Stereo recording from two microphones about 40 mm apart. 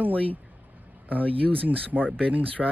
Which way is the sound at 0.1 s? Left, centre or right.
Left.